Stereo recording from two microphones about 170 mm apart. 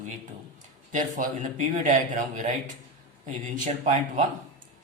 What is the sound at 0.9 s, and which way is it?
A man's voice, 50° right (ahead or behind).